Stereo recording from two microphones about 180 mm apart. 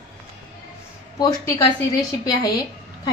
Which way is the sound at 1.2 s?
20° left (ahead or behind).